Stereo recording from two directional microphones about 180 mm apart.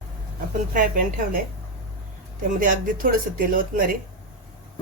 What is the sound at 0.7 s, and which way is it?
Speech, 50° right (ahead or behind).